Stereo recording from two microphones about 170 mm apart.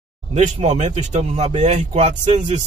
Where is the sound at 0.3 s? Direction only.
45° right (ahead or behind).